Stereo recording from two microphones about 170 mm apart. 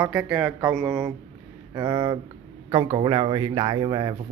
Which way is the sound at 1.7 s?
25° right (ahead or behind).